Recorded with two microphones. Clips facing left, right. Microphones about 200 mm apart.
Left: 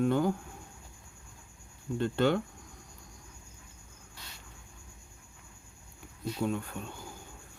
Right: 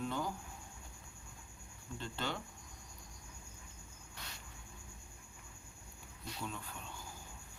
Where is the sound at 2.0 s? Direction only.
60° left (ahead or behind).